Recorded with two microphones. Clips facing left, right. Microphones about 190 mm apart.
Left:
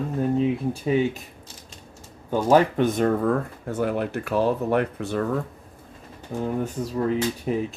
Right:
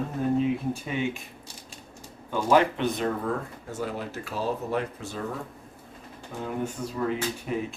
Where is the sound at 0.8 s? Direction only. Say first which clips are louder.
Left 8 dB; 35° left (ahead or behind).